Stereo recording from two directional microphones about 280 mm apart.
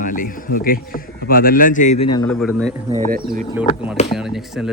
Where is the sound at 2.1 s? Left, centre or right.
Centre.